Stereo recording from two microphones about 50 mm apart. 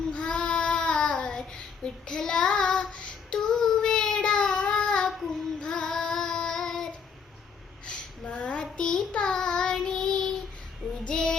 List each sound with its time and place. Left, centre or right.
0.1 s child singing: left
7.9 s a sound: left
8.7 s child singing: centre